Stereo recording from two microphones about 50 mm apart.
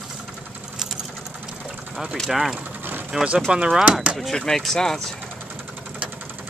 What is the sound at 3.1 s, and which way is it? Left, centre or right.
Speech, centre.